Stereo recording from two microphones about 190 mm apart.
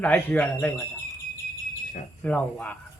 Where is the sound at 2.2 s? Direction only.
5° left (ahead or behind).